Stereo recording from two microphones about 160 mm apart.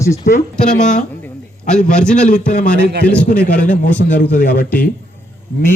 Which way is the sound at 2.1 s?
50° left (ahead or behind).